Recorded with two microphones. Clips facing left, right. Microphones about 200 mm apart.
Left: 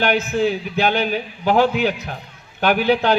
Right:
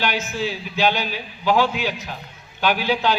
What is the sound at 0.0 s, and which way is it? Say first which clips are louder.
A man's voice: left 6 dB; 55° left (ahead or behind).